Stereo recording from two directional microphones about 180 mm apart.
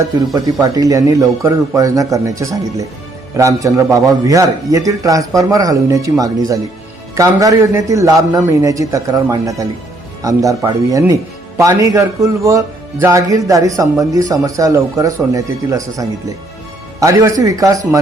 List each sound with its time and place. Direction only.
0.6 s a man's voice: 20° right (ahead or behind)